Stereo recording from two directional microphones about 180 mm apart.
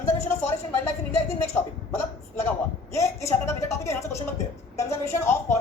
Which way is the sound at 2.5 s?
15° left (ahead or behind).